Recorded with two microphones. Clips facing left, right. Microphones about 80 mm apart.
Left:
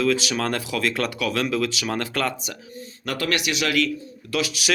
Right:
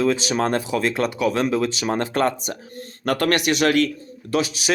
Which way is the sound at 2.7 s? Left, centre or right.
Right.